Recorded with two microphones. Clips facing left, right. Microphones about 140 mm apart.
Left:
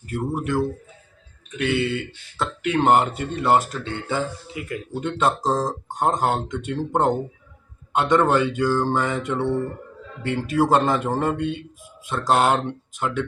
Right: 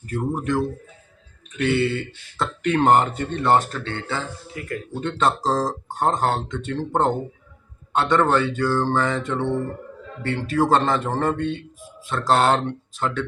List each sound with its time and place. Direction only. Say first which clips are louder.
0.1 s speech: right 1 dB; 10° left (ahead or behind)